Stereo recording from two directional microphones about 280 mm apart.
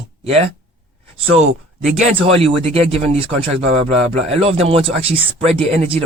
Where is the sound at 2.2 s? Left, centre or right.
Centre.